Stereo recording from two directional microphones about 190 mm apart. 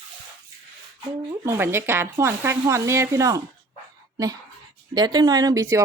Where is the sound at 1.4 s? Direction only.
15° right (ahead or behind).